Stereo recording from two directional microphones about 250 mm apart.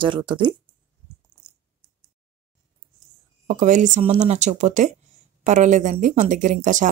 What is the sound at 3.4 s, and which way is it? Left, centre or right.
Speech, right.